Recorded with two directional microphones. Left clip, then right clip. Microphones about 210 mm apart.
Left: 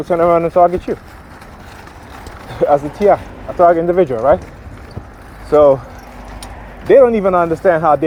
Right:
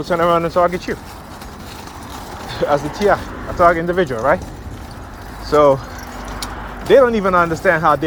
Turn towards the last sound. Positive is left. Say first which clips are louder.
# left 2 dB
turn(degrees=40)  # may be behind; listen again after turning